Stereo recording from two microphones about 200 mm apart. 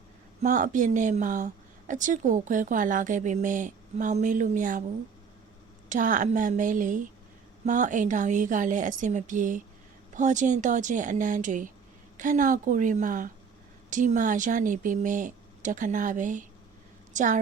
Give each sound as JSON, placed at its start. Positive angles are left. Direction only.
{"t": 0.4, "sound": "speech", "side_deg": -40}
{"t": 5.9, "sound": "speech", "side_deg": -40}